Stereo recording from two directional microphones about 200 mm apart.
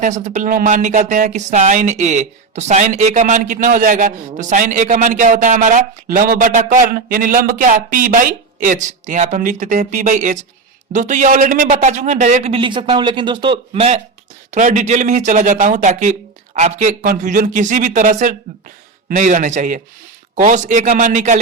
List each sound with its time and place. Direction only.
0.0 s speech: 40° right (ahead or behind)